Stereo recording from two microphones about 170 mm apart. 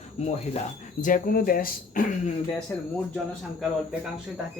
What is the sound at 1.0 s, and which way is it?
Speech, 55° left (ahead or behind).